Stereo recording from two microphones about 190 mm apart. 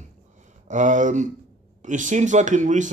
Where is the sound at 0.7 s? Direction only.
40° right (ahead or behind).